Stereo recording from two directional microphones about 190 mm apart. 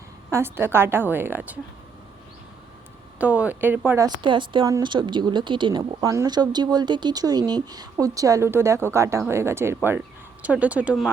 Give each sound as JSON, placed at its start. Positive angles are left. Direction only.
{"t": 0.3, "sound": "a woman's voice", "side_deg": -15}
{"t": 3.2, "sound": "a woman's voice", "side_deg": -10}
{"t": 4.2, "sound": "a woman's voice", "side_deg": -25}